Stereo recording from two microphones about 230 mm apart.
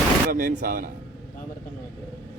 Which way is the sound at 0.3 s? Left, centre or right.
Right.